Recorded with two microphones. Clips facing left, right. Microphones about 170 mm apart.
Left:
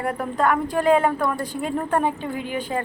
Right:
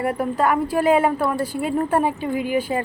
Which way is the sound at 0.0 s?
10° right (ahead or behind).